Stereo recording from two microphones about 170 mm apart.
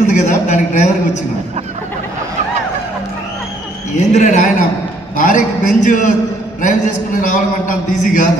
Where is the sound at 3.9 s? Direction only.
45° left (ahead or behind).